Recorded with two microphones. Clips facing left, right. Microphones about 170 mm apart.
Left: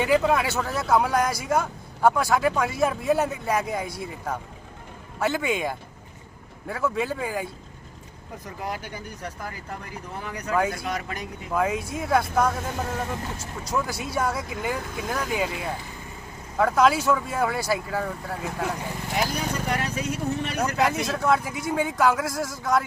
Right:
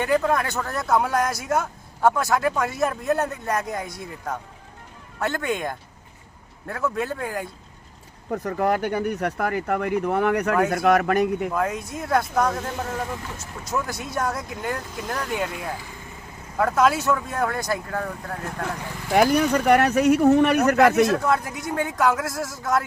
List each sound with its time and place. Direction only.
0.0 s speech: 5° left (ahead or behind)
8.3 s speech: 60° right (ahead or behind)
11.5 s speech: centre (ahead or behind)
13.7 s speech: centre (ahead or behind)
19.1 s speech: 60° right (ahead or behind)
21.0 s speech: centre (ahead or behind)